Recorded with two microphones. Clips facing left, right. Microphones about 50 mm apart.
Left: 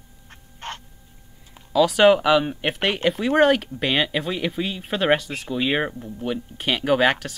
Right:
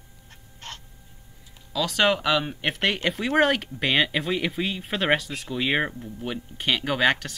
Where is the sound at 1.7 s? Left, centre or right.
Centre.